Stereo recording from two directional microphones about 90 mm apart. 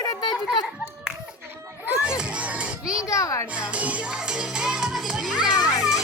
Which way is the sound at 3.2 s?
35° left (ahead or behind).